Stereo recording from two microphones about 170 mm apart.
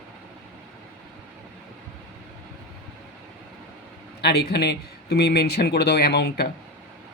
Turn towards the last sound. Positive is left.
turn(degrees=75)  # may be behind; listen again after turning